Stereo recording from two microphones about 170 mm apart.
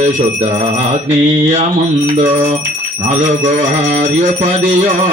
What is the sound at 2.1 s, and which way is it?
Speech, 45° right (ahead or behind).